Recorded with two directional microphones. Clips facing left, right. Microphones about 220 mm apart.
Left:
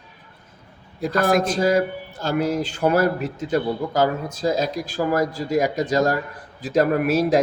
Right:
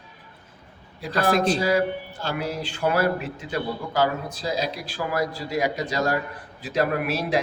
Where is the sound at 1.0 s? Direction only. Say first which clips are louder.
Left 3 dB; 45° left (ahead or behind).